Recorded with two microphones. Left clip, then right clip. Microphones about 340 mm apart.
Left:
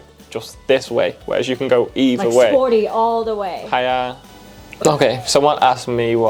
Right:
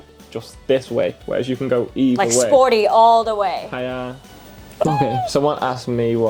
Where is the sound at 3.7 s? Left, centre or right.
Left.